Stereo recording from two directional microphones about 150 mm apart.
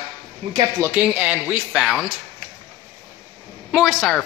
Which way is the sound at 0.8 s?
10° right (ahead or behind).